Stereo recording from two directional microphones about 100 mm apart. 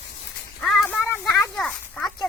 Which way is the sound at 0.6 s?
Centre (ahead or behind).